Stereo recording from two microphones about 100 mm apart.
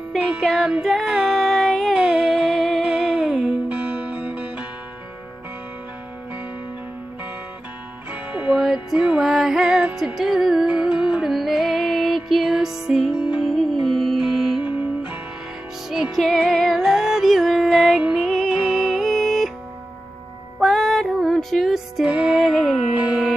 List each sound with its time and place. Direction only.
0.1 s child singing: centre (ahead or behind)
2.0 s a sound: 5° right (ahead or behind)
2.8 s music: 5° right (ahead or behind)
3.7 s music: 15° right (ahead or behind)
8.1 s music: 15° right (ahead or behind)
14.7 s music: 20° right (ahead or behind)
15.9 s music: centre (ahead or behind)
20.5 s music: centre (ahead or behind)